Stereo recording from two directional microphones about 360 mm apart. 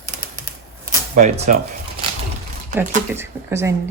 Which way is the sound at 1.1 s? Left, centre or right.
Centre.